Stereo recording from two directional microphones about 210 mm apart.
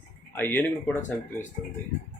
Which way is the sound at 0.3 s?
10° left (ahead or behind).